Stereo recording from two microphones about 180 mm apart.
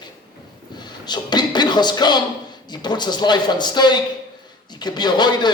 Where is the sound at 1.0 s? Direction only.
25° left (ahead or behind).